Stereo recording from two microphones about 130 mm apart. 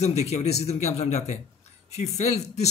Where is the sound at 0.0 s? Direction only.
55° left (ahead or behind).